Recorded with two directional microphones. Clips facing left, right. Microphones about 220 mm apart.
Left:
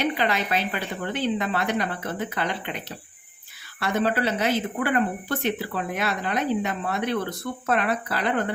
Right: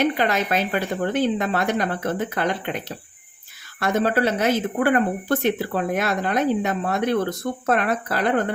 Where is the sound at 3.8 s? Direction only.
45° right (ahead or behind).